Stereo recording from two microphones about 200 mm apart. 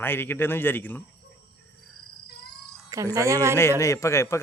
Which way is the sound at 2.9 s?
15° right (ahead or behind).